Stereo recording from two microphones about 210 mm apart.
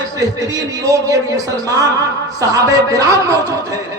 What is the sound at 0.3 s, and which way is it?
A man's voice, 15° right (ahead or behind).